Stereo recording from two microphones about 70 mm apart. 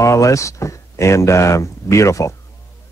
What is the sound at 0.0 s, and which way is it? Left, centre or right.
Speech, left.